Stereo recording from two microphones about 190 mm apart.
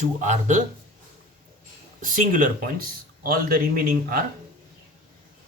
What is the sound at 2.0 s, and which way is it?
Speech, 45° right (ahead or behind).